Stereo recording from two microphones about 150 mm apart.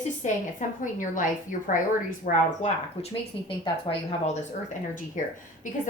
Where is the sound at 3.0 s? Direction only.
40° left (ahead or behind).